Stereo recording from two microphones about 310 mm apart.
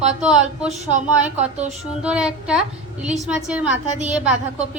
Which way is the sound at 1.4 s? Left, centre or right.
Right.